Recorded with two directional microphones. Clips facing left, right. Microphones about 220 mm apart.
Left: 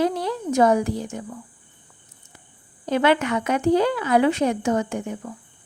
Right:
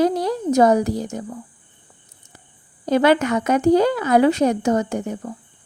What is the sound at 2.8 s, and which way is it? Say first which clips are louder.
Speech: right 4 dB; 40° right (ahead or behind).